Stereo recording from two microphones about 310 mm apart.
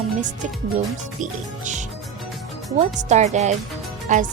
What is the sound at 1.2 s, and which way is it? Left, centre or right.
Speech, right.